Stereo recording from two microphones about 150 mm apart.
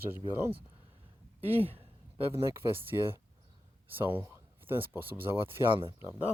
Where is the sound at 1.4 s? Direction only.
40° right (ahead or behind).